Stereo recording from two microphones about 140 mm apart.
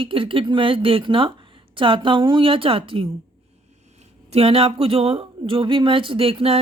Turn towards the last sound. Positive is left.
turn(degrees=-45)  # may be behind; listen again after turning